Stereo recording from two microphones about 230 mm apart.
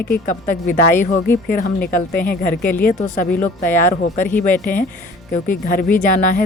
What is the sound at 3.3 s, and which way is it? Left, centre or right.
Speech, centre.